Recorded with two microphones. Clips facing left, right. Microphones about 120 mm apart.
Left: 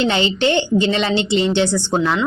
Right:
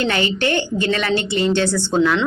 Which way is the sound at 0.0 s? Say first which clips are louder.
Left 2 dB; 20° left (ahead or behind).